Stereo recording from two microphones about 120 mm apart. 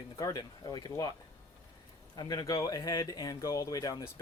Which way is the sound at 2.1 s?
35° left (ahead or behind).